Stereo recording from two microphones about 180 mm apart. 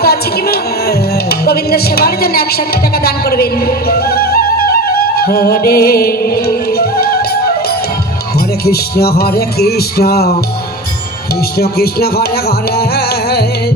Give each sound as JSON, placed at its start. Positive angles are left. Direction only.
{"t": 0.0, "sound": "music", "side_deg": 60}
{"t": 8.6, "sound": "music", "side_deg": 60}
{"t": 11.6, "sound": "music", "side_deg": 60}